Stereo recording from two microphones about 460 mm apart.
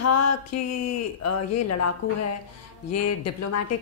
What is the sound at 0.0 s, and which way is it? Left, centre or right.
Speech, left.